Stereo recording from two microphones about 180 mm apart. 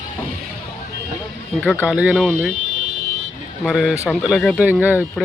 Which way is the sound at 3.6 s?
5° right (ahead or behind).